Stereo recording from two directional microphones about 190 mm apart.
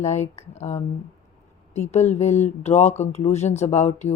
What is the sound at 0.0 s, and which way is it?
Speech, 35° left (ahead or behind).